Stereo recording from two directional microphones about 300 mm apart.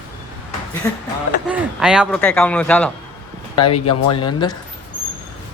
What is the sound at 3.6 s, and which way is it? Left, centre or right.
Speech, left.